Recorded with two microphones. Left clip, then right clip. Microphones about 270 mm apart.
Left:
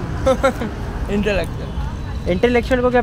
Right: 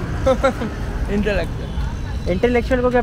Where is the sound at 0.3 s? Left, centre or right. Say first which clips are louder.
Left 1 dB; left.